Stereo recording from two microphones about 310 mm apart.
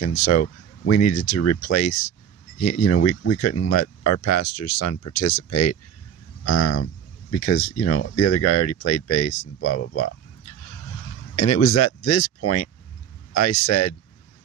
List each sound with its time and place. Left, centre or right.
0.0 s speech: left